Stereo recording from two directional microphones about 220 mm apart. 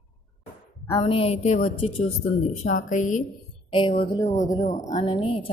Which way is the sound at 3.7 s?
20° left (ahead or behind).